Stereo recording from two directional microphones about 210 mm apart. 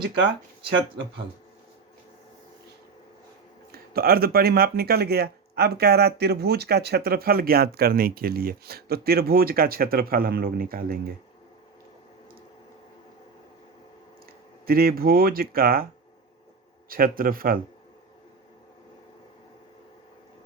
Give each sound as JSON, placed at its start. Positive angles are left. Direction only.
{"t": 3.7, "sound": "speech", "side_deg": -45}
{"t": 14.7, "sound": "speech", "side_deg": -45}
{"t": 16.9, "sound": "speech", "side_deg": -45}